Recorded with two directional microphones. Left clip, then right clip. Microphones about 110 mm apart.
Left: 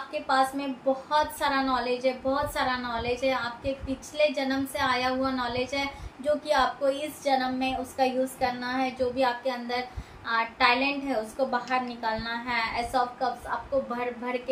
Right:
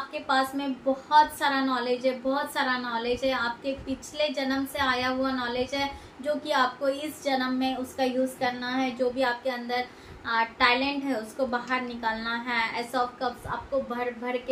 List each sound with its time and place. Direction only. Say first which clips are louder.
0.1 s a woman's voice: left 2 dB; 10° right (ahead or behind)